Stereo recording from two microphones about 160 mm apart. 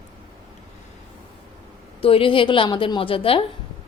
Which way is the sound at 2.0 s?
35° left (ahead or behind).